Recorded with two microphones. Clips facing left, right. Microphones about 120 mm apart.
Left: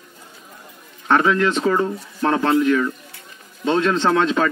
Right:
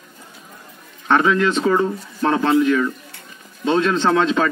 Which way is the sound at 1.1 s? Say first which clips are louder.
Right 1 dB; 15° right (ahead or behind).